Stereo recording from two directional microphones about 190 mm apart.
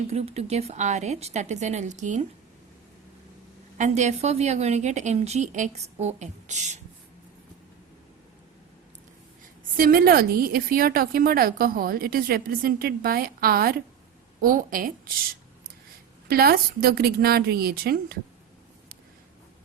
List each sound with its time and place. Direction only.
0.1 s a woman's voice: 35° right (ahead or behind)
3.8 s a woman's voice: 40° right (ahead or behind)
9.7 s a woman's voice: 50° right (ahead or behind)